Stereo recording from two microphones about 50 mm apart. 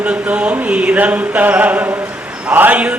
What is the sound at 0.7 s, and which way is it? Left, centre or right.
Mantra, right.